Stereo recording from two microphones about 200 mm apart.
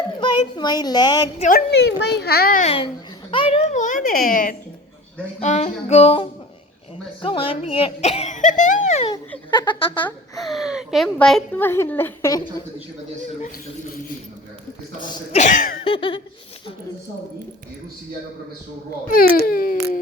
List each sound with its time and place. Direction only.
0.2 s a child's voice: 20° left (ahead or behind)
1.4 s a child's voice: 45° left (ahead or behind)
2.6 s speech: 25° left (ahead or behind)
9.5 s speech: 25° left (ahead or behind)
10.4 s a woman's voice: centre (ahead or behind); by 12.6 s 15° left (ahead or behind)
13.4 s speech: 40° left (ahead or behind)
15.1 s speech: 35° left (ahead or behind)
15.8 s a sound: 25° left (ahead or behind)
19.0 s a child's voice: 45° left (ahead or behind)